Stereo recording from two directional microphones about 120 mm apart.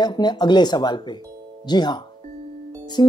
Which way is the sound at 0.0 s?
35° left (ahead or behind).